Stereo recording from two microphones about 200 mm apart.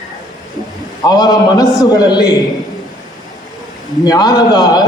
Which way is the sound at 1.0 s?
20° left (ahead or behind).